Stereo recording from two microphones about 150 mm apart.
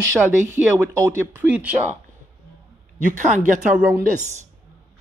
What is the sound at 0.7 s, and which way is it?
Speech, 20° right (ahead or behind).